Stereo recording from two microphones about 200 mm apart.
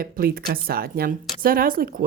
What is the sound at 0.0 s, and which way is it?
Speech, 45° right (ahead or behind).